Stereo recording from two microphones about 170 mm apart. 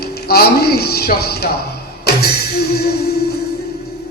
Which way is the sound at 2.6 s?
70° left (ahead or behind).